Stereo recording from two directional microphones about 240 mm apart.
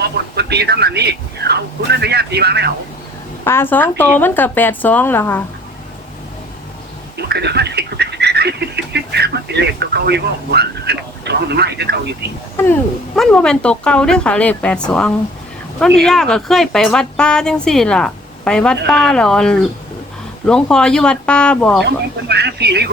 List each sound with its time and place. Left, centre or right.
0.0 s speech: right
3.4 s speech: centre
7.2 s speech: right
13.1 s speech: centre
21.8 s speech: right